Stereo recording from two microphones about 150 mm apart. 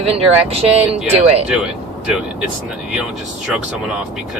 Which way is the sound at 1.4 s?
5° right (ahead or behind).